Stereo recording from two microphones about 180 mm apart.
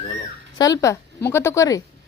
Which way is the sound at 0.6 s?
20° left (ahead or behind).